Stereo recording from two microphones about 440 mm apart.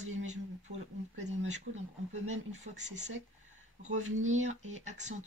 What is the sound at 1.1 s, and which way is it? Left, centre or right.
Speech, centre.